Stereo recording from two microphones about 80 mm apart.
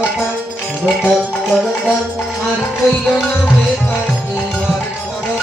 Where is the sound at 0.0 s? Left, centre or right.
Centre.